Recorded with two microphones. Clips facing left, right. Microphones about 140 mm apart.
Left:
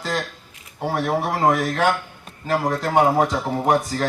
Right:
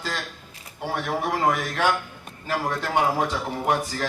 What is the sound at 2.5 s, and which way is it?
Speech, 35° left (ahead or behind).